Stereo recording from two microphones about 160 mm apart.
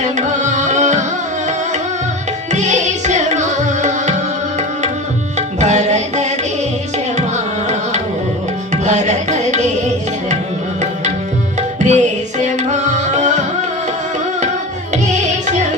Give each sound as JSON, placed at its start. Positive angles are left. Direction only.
{"t": 0.0, "sound": "music", "side_deg": -50}
{"t": 2.5, "sound": "music", "side_deg": -45}
{"t": 5.5, "sound": "music", "side_deg": -45}
{"t": 8.7, "sound": "music", "side_deg": -45}
{"t": 11.8, "sound": "music", "side_deg": -50}
{"t": 15.1, "sound": "tabla", "side_deg": -45}